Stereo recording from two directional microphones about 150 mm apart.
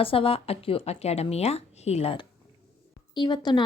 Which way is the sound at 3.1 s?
30° left (ahead or behind).